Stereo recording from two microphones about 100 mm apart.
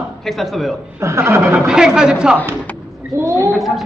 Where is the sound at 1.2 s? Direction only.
25° right (ahead or behind).